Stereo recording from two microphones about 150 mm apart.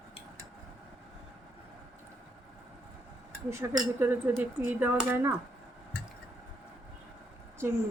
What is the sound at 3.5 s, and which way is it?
Speech, 15° right (ahead or behind).